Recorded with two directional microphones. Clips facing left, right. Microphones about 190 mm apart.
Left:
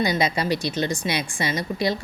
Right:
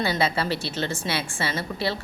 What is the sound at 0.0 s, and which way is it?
A woman's voice, 15° left (ahead or behind).